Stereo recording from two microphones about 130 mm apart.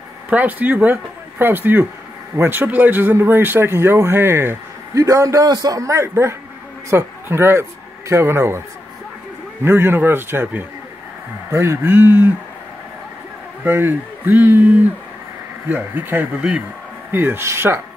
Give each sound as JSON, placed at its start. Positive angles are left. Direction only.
{"t": 0.3, "sound": "speech", "side_deg": -10}
{"t": 9.7, "sound": "speech", "side_deg": -15}
{"t": 13.7, "sound": "speech", "side_deg": -15}